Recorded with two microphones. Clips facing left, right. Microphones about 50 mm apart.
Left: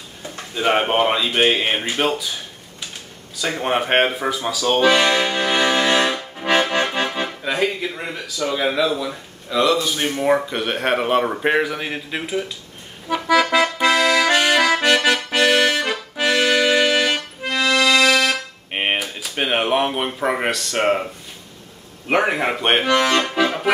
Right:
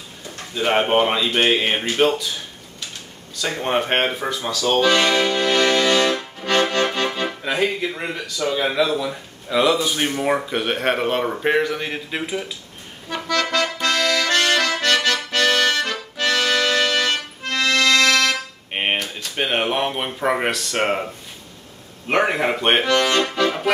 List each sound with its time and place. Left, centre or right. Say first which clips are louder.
0.6 s speech: even; centre
3.3 s speech: left 1 dB; centre
4.7 s accordion: left 1 dB; centre
7.5 s speech: even; centre
9.5 s speech: even; centre
13.1 s accordion: left 5 dB; centre
22.1 s speech: even; centre
22.8 s accordion: left 1 dB; centre